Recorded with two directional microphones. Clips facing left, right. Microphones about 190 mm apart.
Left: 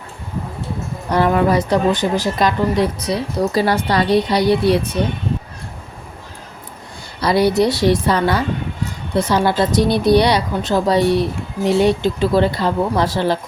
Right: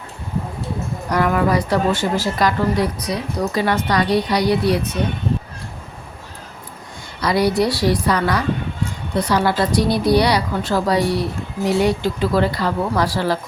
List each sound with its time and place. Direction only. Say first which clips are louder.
1.1 s speech: left 3 dB; 30° left (ahead or behind)
7.2 s speech: left 3 dB; 25° left (ahead or behind)